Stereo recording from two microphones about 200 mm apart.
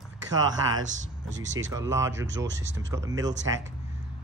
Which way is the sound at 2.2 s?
65° right (ahead or behind).